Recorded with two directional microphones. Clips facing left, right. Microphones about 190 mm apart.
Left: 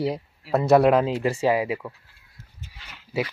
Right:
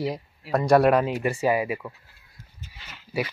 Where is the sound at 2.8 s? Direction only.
5° right (ahead or behind).